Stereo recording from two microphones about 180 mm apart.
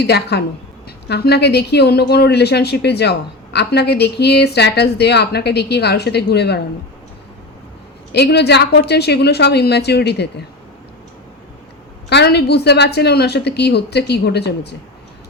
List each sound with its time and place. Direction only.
0.0 s speech: 65° left (ahead or behind)
8.1 s a woman's voice: 70° left (ahead or behind)
12.0 s a woman's voice: 65° left (ahead or behind)